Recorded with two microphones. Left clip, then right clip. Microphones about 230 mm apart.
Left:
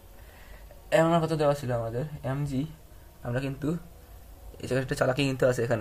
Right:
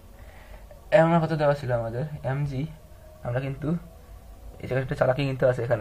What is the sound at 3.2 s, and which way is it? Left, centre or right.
Speech, left.